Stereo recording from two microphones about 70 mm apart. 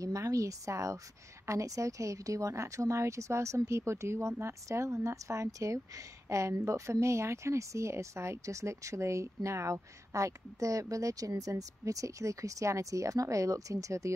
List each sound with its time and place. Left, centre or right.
0.0 s a woman's voice: right